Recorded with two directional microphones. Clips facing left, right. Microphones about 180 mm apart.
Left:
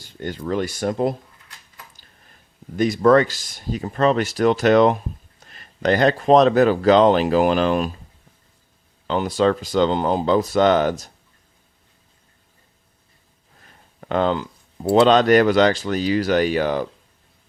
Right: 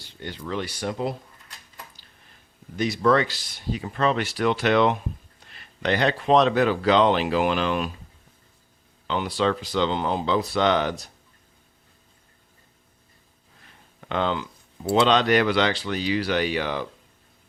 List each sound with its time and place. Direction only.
0.0 s speech: 45° left (ahead or behind)
2.7 s speech: 45° left (ahead or behind)
9.0 s speech: 40° left (ahead or behind)
14.0 s speech: 40° left (ahead or behind)